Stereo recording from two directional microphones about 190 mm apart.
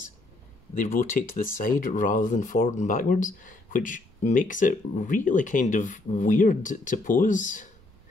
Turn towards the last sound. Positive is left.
turn(degrees=40)  # may be behind; listen again after turning